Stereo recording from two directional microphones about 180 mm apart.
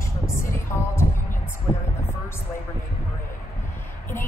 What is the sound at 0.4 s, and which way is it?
Music, 15° left (ahead or behind).